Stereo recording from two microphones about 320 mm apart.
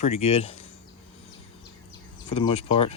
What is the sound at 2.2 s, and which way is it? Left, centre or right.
Speech, centre.